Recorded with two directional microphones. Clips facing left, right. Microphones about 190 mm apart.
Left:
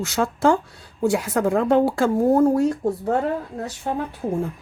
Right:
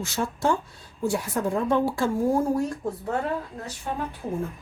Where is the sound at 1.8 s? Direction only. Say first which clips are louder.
Left 5 dB; 70° left (ahead or behind).